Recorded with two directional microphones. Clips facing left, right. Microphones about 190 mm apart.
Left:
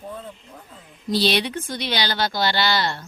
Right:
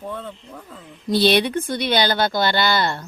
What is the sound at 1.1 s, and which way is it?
Speech, 55° right (ahead or behind).